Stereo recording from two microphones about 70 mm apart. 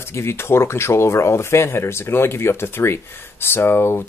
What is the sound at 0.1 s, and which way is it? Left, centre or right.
Speech, left.